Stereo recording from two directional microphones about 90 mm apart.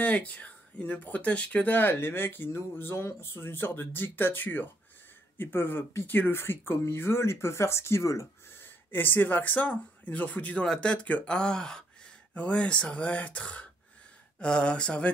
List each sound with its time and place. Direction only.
0.0 s speech: 15° left (ahead or behind)